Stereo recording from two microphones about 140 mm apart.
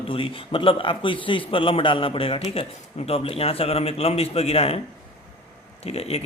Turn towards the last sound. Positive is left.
turn(degrees=45)  # may be behind; listen again after turning